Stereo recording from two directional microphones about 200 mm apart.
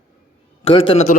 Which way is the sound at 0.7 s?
25° left (ahead or behind).